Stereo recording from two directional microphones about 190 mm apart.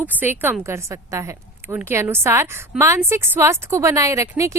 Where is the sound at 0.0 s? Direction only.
10° right (ahead or behind).